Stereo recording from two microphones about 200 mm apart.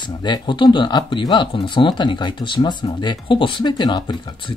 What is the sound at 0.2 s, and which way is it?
Speech, 25° left (ahead or behind).